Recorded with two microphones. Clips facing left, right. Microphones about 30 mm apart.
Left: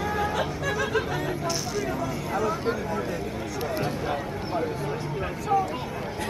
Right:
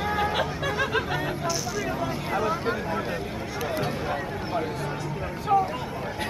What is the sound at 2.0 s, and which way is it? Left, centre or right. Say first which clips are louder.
Speech: right 1 dB; right.